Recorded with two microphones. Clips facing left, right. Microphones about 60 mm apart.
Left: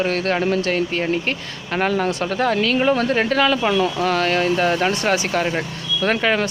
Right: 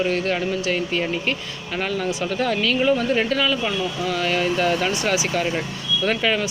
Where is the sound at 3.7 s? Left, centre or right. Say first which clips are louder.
Left 6 dB; left.